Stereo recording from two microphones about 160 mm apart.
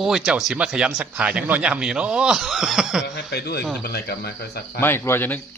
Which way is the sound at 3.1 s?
90° left.